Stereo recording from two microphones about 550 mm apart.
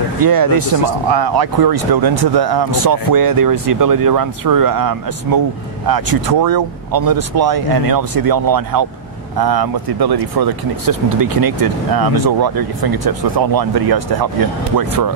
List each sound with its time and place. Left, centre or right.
0.2 s speech: right